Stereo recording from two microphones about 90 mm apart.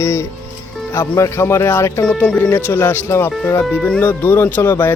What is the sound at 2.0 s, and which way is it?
Speech, 15° left (ahead or behind).